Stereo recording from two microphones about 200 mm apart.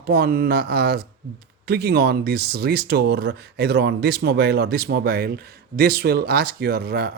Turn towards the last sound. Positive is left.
turn(degrees=-50)  # may be behind; listen again after turning